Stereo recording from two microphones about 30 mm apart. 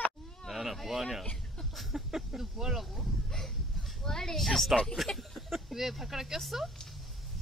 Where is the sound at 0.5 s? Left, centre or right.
Centre.